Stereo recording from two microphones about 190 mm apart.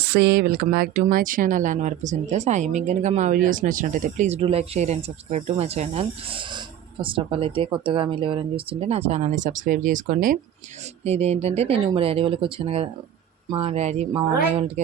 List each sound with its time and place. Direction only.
0.1 s speech: 60° right (ahead or behind)
11.0 s speech: 35° right (ahead or behind)